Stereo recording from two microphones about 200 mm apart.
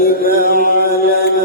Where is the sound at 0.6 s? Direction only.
50° left (ahead or behind).